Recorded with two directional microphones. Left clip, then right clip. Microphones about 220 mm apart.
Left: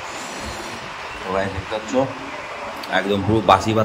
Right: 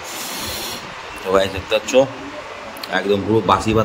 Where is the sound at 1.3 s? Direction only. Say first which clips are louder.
Right 7 dB; 40° right (ahead or behind).